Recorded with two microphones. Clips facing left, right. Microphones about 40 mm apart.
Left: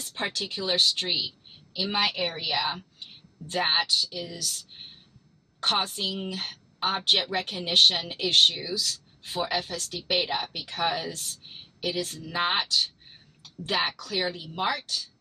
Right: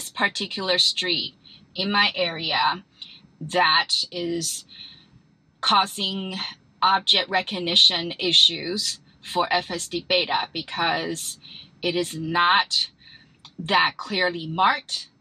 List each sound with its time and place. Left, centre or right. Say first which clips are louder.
0.0 s speech: right 7 dB; right